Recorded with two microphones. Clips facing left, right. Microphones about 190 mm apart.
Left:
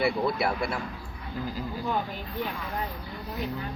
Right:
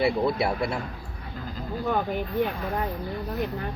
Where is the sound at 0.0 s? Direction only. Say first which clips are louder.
Right 2 dB; 25° right (ahead or behind).